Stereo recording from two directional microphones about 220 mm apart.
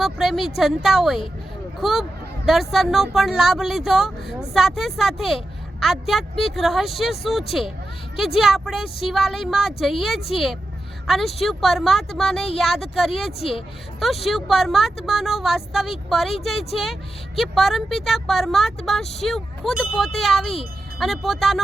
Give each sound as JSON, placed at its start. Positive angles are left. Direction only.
{"t": 0.0, "sound": "a woman's voice", "side_deg": 0}